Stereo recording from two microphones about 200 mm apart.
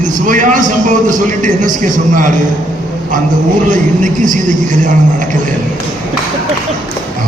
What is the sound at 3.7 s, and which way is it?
Speech, 40° right (ahead or behind).